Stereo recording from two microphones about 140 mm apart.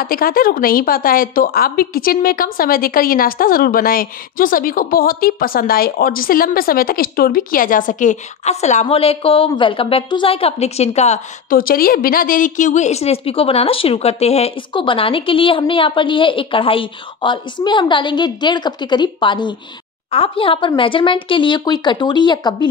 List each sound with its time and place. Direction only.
0.0 s a woman's voice: 90° left; by 8.8 s 55° left (ahead or behind)
8.8 s a woman's voice: 45° left (ahead or behind)
11.5 s a woman's voice: 90° left; by 14.5 s 50° left (ahead or behind)
14.7 s a woman's voice: 35° left (ahead or behind)